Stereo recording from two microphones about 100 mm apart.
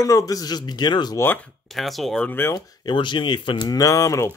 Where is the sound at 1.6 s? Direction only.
Centre (ahead or behind).